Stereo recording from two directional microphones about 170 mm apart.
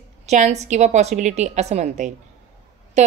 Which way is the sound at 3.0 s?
45° right (ahead or behind).